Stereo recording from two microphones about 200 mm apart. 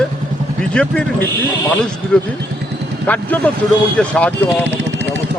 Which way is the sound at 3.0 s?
10° left (ahead or behind).